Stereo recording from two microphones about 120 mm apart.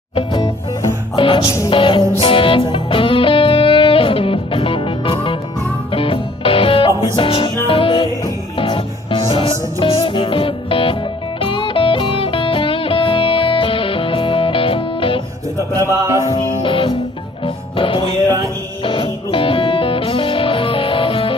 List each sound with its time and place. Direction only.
0.1 s music: 45° left (ahead or behind)
1.4 s music: 25° left (ahead or behind)
1.7 s music: 45° left (ahead or behind)
15.7 s music: 25° right (ahead or behind)
16.3 s music: 45° left (ahead or behind)